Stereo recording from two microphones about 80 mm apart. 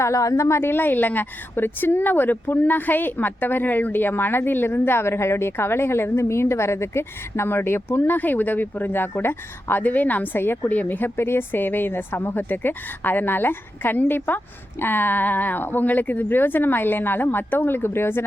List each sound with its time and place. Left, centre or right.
0.0 s a woman's voice: left